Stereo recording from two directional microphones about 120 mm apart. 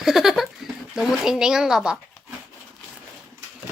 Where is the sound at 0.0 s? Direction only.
5° right (ahead or behind).